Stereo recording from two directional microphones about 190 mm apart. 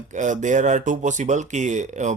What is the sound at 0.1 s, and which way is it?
Speech, 40° right (ahead or behind).